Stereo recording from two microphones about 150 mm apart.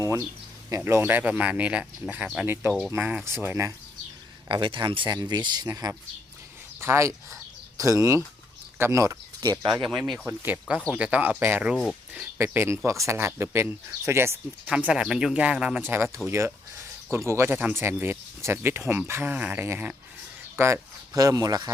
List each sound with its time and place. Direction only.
0.0 s a sound: 20° right (ahead or behind)
0.7 s speech: 20° right (ahead or behind)
4.4 s speech: 30° right (ahead or behind)
9.6 s speech: centre (ahead or behind); by 14.3 s 15° right (ahead or behind)
14.7 s speech: 5° right (ahead or behind); by 21.7 s 25° right (ahead or behind)